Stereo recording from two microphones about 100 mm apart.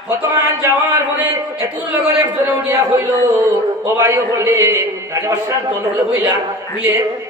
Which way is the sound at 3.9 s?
30° right (ahead or behind).